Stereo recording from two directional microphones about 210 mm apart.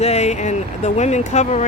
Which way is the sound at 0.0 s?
30° left (ahead or behind).